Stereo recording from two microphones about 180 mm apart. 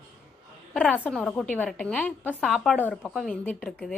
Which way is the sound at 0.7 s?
10° left (ahead or behind).